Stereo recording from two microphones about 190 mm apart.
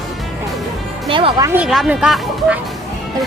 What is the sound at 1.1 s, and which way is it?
Speech, 25° right (ahead or behind).